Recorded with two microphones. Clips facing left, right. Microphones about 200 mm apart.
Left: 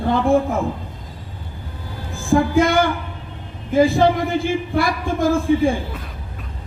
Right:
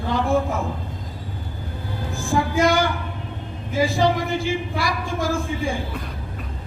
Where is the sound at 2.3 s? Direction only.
55° left (ahead or behind).